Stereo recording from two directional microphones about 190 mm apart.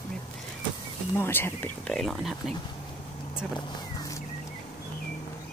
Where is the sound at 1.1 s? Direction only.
10° left (ahead or behind).